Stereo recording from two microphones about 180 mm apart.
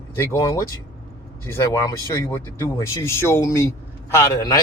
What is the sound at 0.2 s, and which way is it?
Speech, 15° left (ahead or behind).